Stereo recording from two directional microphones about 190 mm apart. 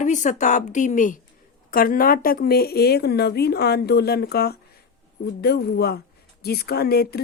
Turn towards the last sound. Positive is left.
turn(degrees=55)  # may be behind; listen again after turning